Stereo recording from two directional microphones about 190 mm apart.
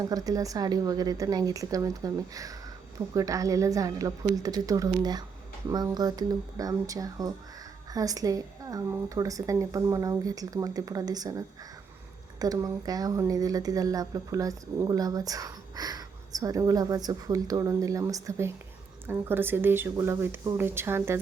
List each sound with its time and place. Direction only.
0.0 s speech: 20° right (ahead or behind)